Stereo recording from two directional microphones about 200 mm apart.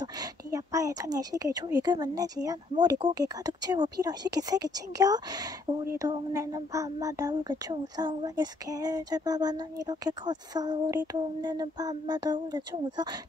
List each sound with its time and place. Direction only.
0.0 s speech: 20° right (ahead or behind)